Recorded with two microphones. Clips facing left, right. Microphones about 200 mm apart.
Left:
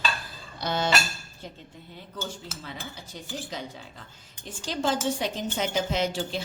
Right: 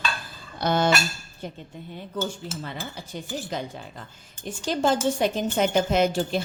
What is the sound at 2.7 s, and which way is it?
Speech, 55° right (ahead or behind).